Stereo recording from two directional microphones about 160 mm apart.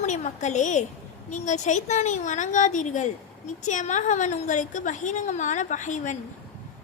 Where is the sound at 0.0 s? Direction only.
50° left (ahead or behind).